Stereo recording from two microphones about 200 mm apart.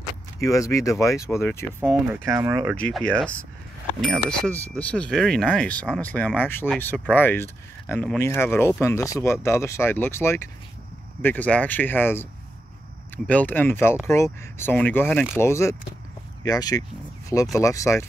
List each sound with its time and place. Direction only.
0.4 s speech: 15° left (ahead or behind)
2.2 s speech: 15° right (ahead or behind)
2.8 s speech: 5° left (ahead or behind)